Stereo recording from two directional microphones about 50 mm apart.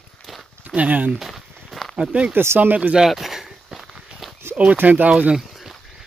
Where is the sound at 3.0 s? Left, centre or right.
Centre.